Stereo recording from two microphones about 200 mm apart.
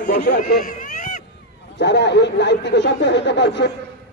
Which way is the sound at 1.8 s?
60° left (ahead or behind).